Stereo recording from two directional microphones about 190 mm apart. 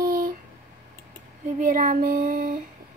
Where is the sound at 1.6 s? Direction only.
45° right (ahead or behind).